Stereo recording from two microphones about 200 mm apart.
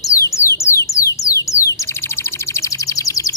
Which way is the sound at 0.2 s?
15° left (ahead or behind).